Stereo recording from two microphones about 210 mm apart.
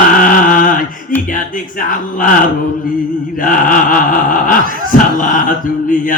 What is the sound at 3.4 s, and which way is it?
A man's voice, 40° left (ahead or behind).